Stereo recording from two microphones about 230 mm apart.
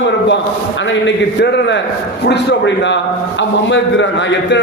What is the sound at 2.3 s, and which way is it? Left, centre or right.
Speech, left.